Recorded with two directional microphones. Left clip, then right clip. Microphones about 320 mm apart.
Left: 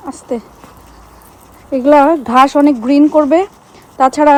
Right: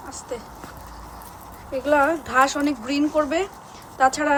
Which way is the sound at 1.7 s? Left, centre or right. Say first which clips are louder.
Left 11 dB; centre.